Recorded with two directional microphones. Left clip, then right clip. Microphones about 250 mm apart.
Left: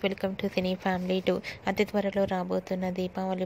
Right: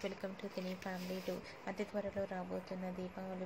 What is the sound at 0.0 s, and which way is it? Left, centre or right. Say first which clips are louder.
A woman's voice: left 14 dB; left.